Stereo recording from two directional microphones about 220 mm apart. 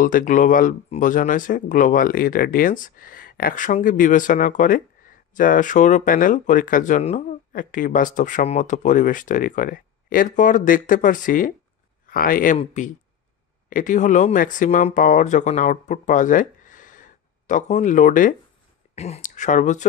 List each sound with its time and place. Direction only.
0.0 s speech: 35° left (ahead or behind)